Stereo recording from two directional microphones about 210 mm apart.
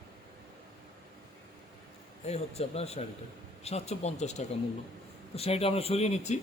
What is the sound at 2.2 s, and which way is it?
Speech, 30° left (ahead or behind).